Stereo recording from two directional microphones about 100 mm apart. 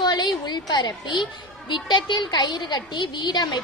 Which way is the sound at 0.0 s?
45° left (ahead or behind).